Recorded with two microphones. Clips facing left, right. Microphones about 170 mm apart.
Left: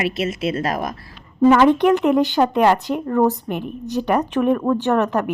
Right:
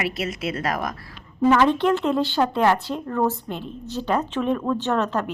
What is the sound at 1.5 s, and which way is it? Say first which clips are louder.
Speech: left 4 dB; 15° left (ahead or behind).